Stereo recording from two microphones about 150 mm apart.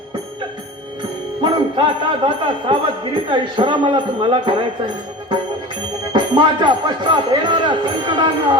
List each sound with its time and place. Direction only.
1.4 s speech: 30° right (ahead or behind)
6.1 s speech: 30° right (ahead or behind)